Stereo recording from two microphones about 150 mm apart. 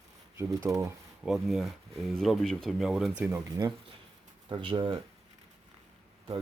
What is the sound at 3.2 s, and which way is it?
Speech, 15° right (ahead or behind).